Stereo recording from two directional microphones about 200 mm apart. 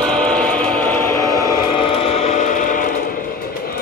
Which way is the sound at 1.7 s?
30° left (ahead or behind).